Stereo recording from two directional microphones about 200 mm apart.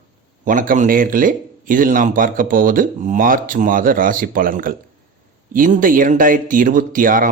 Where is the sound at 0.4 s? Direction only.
40° right (ahead or behind).